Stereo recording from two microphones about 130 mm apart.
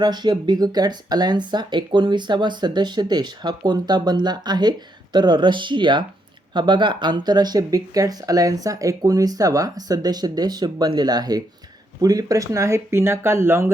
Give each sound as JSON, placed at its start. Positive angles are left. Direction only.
{"t": 0.0, "sound": "speech", "side_deg": -35}